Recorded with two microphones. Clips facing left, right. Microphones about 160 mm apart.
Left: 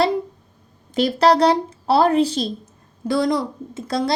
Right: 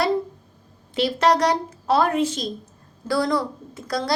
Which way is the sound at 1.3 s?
30° left (ahead or behind).